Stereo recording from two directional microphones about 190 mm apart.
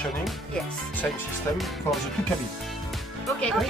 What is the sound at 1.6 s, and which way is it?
Speech, centre (ahead or behind).